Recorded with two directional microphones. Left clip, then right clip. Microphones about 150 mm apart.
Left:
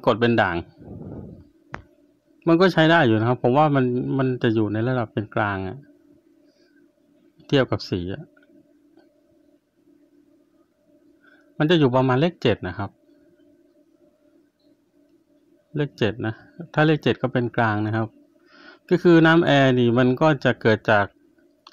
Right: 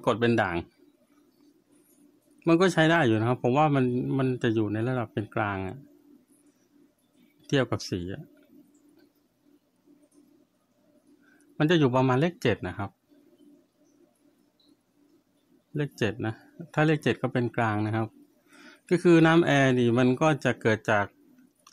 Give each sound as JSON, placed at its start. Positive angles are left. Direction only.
{"t": 0.0, "sound": "a man's voice", "side_deg": 20}
{"t": 2.4, "sound": "a man's voice", "side_deg": 15}
{"t": 7.4, "sound": "a man's voice", "side_deg": 20}
{"t": 11.5, "sound": "a man's voice", "side_deg": 15}
{"t": 15.7, "sound": "a man's voice", "side_deg": 15}